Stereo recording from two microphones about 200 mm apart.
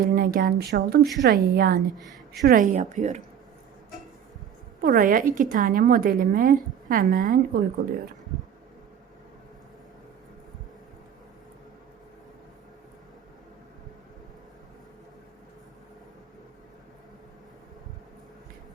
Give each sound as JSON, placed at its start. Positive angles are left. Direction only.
{"t": 0.0, "sound": "a woman's voice", "side_deg": -45}
{"t": 4.8, "sound": "a woman's voice", "side_deg": -45}